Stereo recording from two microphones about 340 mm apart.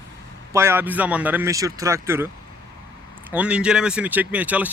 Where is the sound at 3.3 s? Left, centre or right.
Centre.